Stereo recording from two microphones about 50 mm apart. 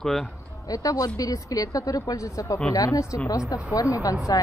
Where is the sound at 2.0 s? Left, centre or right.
Left.